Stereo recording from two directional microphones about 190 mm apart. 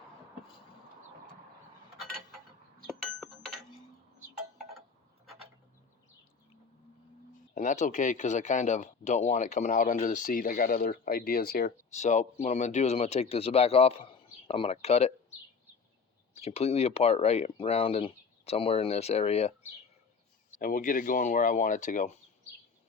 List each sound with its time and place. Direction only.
2.8 s a sound: centre (ahead or behind)
7.5 s speech: 40° left (ahead or behind)
11.9 s speech: 40° left (ahead or behind)
16.3 s speech: 35° left (ahead or behind)
20.6 s speech: 45° left (ahead or behind)